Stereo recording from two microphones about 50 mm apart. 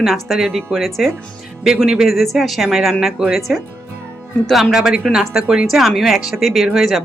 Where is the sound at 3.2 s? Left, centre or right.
Centre.